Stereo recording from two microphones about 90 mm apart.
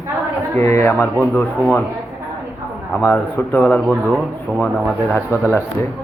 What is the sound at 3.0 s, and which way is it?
Speech, 25° left (ahead or behind).